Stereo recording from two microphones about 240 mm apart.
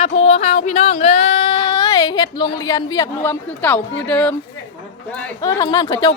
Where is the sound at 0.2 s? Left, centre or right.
Left; by 4.4 s centre.